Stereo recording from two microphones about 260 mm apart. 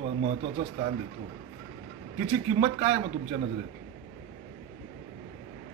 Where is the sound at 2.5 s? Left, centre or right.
Centre.